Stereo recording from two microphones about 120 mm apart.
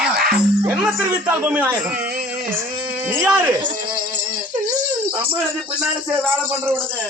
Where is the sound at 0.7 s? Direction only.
5° right (ahead or behind).